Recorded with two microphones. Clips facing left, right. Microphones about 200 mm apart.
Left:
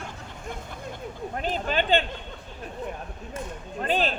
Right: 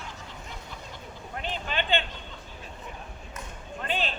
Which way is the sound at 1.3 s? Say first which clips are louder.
Left 5 dB; 40° left (ahead or behind).